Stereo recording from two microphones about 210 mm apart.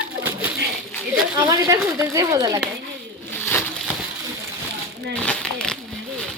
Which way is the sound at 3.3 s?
10° left (ahead or behind).